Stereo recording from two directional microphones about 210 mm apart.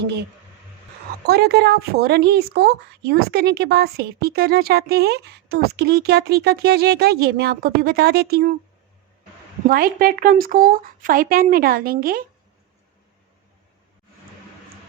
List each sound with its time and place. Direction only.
0.0 s speech: 50° right (ahead or behind)
1.3 s speech: 50° right (ahead or behind)
9.6 s speech: 45° right (ahead or behind)